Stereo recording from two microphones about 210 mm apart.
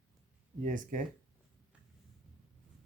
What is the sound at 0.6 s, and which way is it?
Speech, 40° right (ahead or behind).